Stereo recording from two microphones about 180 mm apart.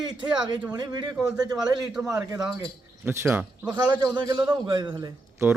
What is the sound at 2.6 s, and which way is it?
A man's voice, 15° right (ahead or behind).